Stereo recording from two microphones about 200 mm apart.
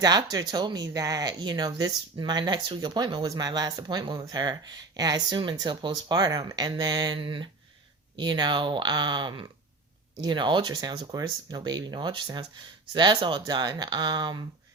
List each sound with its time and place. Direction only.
0.0 s speech: 20° right (ahead or behind)